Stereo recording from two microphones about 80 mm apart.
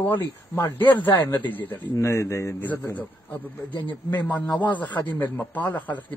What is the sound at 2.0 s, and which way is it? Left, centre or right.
Speech, left.